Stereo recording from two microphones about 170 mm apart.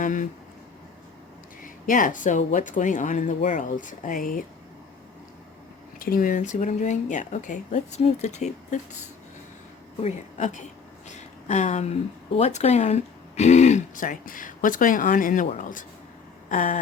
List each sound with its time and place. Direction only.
0.0 s speech: 50° left (ahead or behind)
1.6 s speech: 50° left (ahead or behind)
6.0 s speech: 55° left (ahead or behind)
10.0 s speech: 45° left (ahead or behind)
11.1 s a sound: 45° left (ahead or behind)
12.3 s speech: 40° left (ahead or behind)
16.5 s a sound: 50° left (ahead or behind)